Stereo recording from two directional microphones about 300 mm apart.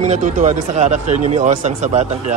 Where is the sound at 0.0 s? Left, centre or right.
Right.